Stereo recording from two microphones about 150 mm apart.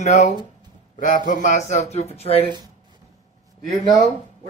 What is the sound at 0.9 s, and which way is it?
A man's voice, 60° left (ahead or behind).